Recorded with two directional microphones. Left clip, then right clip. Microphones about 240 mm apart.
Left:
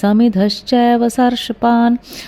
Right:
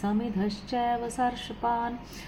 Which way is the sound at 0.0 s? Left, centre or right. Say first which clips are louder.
Left 16 dB; left.